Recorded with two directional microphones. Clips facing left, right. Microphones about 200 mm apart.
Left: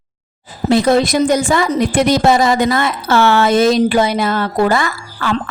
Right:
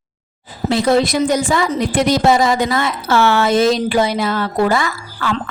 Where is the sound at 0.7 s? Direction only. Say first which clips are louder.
Left 2 dB; 50° left (ahead or behind).